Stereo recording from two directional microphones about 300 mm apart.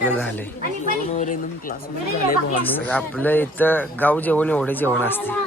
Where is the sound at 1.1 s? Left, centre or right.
Left.